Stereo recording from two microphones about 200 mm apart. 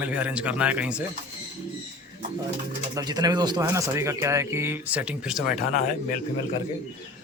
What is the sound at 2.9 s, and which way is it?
Speech, 20° right (ahead or behind).